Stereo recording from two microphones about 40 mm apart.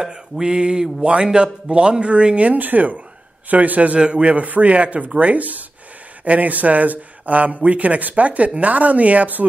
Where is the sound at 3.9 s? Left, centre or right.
Right.